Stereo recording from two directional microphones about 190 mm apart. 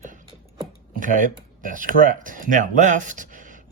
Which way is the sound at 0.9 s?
45° right (ahead or behind).